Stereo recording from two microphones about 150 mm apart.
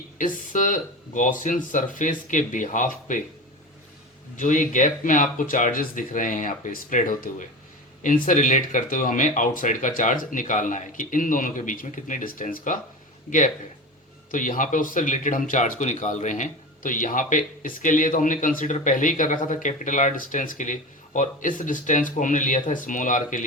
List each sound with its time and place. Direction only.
0.2 s speech: 60° left (ahead or behind)
4.4 s speech: 60° left (ahead or behind)
14.3 s speech: 65° left (ahead or behind)